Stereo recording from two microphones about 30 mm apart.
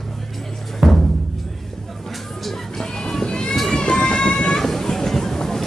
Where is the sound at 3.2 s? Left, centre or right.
Left.